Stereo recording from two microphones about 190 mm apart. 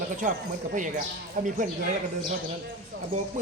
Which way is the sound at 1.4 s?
40° right (ahead or behind).